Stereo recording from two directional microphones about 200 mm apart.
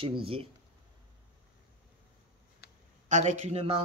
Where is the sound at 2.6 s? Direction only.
55° left (ahead or behind).